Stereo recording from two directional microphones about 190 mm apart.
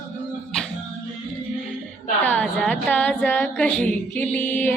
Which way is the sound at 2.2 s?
5° left (ahead or behind).